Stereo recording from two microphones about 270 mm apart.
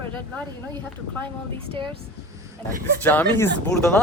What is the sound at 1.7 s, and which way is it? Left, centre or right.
Speech, centre.